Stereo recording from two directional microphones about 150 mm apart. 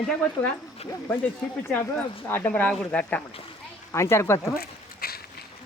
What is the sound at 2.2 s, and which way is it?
Speech, 10° left (ahead or behind).